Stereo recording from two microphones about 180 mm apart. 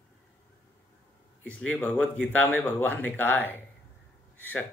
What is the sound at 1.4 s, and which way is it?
Speech, 5° left (ahead or behind).